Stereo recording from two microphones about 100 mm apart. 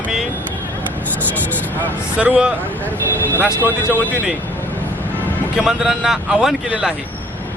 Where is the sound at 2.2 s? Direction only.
10° right (ahead or behind).